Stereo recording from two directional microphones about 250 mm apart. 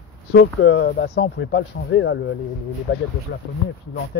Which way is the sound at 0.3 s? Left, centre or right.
Left.